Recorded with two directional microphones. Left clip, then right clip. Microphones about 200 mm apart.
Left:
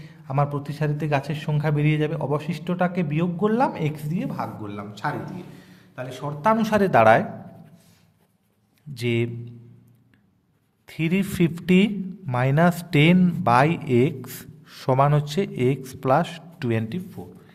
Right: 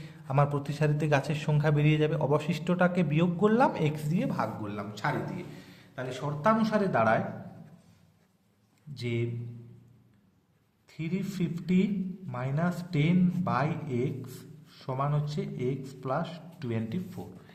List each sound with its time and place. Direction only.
0.0 s a man's voice: 5° left (ahead or behind)
6.6 s speech: 30° left (ahead or behind)
9.0 s a man's voice: 30° left (ahead or behind)
10.8 s speech: 35° left (ahead or behind)
17.1 s speech: 10° left (ahead or behind)